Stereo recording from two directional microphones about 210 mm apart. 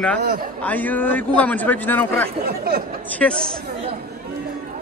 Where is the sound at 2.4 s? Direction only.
50° right (ahead or behind).